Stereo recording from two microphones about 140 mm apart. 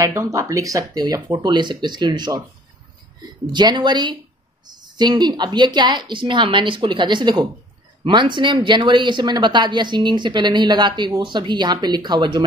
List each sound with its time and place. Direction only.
0.0 s speech: 20° right (ahead or behind)
3.5 s speech: 35° right (ahead or behind)